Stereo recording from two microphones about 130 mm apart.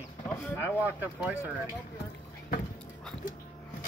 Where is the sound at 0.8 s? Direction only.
15° right (ahead or behind).